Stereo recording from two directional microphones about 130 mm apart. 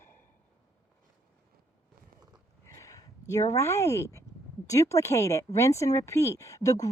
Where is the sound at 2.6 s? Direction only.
25° left (ahead or behind).